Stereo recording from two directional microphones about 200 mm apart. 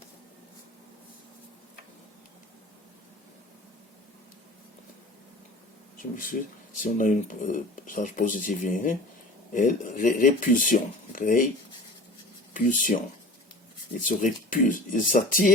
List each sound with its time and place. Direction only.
6.0 s speech: 40° left (ahead or behind)
12.5 s speech: 40° left (ahead or behind)
14.1 s speech: 40° left (ahead or behind)